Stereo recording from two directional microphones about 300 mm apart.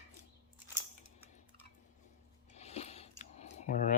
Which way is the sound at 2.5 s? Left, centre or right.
Left.